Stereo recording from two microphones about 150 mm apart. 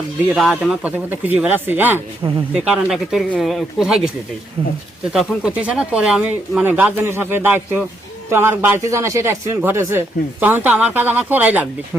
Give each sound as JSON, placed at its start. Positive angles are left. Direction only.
{"t": 0.3, "sound": "speech", "side_deg": 0}
{"t": 2.2, "sound": "speech", "side_deg": -30}
{"t": 2.6, "sound": "speech", "side_deg": -5}
{"t": 5.1, "sound": "speech", "side_deg": -5}